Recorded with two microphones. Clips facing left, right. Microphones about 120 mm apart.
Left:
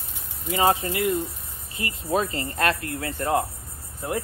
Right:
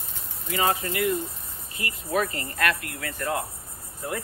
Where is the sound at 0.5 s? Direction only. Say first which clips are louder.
Left 4 dB; 25° left (ahead or behind).